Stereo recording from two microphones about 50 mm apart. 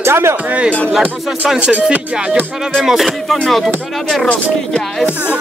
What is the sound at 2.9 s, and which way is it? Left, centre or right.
Music, centre.